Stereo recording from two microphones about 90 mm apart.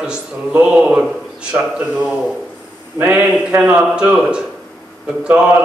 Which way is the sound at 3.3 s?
10° right (ahead or behind).